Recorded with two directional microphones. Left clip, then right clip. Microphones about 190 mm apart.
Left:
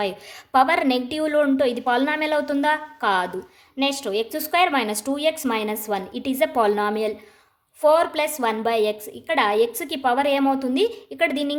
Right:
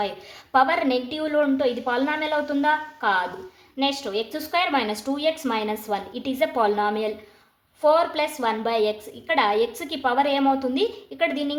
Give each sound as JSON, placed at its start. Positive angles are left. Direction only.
{"t": 0.5, "sound": "a woman's voice", "side_deg": 35}